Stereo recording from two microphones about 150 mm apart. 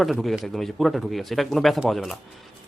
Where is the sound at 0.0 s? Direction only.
Centre (ahead or behind).